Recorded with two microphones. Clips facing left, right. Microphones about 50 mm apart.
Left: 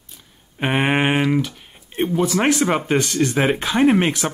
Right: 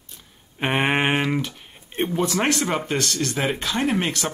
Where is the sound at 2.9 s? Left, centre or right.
Centre.